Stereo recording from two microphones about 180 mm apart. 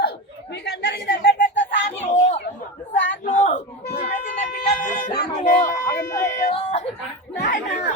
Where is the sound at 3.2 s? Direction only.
40° left (ahead or behind).